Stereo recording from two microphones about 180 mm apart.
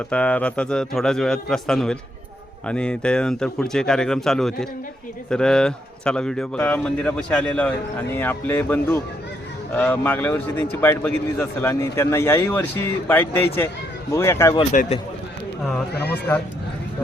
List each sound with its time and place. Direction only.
0.1 s speech: 5° left (ahead or behind)
14.7 s a man's voice: 45° left (ahead or behind)
15.6 s speech: 10° left (ahead or behind)